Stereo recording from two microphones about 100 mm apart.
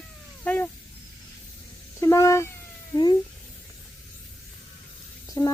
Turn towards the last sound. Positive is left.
turn(degrees=35)  # may be behind; listen again after turning